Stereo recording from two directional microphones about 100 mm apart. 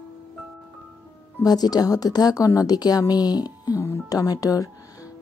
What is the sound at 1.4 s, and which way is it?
A woman's voice, 40° left (ahead or behind).